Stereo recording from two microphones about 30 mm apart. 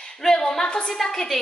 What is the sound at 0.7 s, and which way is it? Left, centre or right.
Speech, left.